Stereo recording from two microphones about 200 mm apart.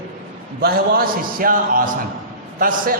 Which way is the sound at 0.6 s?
50° right (ahead or behind).